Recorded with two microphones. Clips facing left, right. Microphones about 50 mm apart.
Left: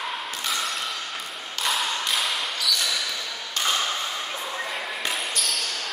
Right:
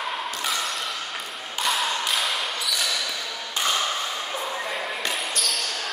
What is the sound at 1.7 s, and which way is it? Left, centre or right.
Thump, centre.